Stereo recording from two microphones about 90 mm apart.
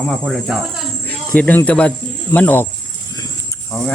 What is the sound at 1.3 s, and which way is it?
Speech, 15° left (ahead or behind).